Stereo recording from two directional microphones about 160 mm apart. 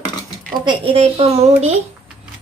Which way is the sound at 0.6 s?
35° right (ahead or behind).